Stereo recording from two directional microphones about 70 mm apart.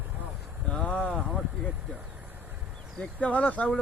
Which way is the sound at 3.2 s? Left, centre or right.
Centre.